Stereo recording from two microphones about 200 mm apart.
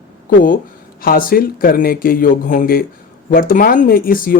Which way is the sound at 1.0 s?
45° left (ahead or behind).